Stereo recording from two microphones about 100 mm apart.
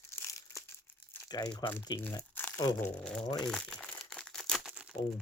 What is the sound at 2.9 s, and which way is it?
Speech, 10° left (ahead or behind).